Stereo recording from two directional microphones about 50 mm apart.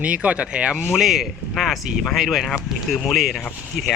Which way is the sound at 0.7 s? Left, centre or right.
Centre.